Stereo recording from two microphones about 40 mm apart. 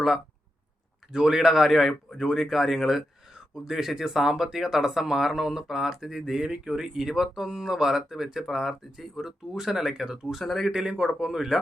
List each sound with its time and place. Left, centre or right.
1.1 s speech: centre
10.3 s speech: centre
10.7 s speech: centre